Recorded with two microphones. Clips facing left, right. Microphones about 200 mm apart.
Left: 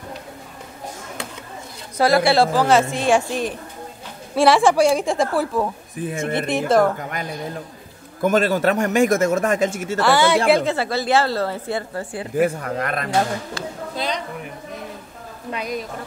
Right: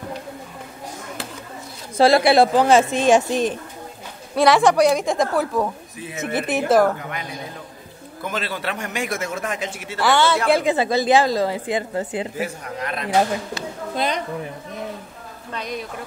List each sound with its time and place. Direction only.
2.0 s a woman's voice: 25° right (ahead or behind)
4.4 s a woman's voice: centre (ahead or behind)
5.9 s a man's voice: 50° left (ahead or behind)
6.3 s a woman's voice: 5° right (ahead or behind)
8.2 s a man's voice: 45° left (ahead or behind)
10.1 s a woman's voice: 15° left (ahead or behind)
10.6 s a woman's voice: 15° right (ahead or behind)
12.4 s speech: 55° left (ahead or behind)
13.9 s speech: 50° right (ahead or behind)
15.5 s a woman's voice: 5° left (ahead or behind)